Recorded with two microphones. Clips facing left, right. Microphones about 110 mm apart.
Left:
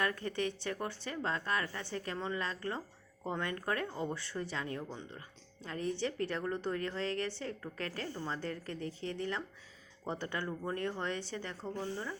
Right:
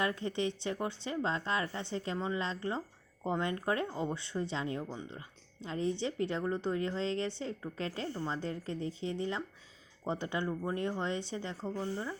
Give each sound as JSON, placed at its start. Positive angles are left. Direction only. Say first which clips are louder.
{"t": 0.0, "sound": "a woman's voice", "louder": "right 2 dB", "side_deg": -20}